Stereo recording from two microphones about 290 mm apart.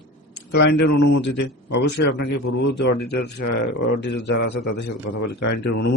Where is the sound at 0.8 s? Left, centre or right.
Left.